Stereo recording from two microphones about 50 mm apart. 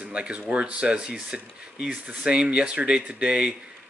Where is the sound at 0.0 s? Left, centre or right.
Right.